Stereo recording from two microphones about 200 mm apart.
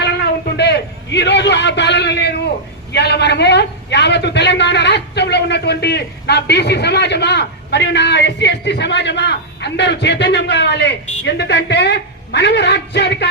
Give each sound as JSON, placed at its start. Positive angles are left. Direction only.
{"t": 0.5, "sound": "a man's voice", "side_deg": 55}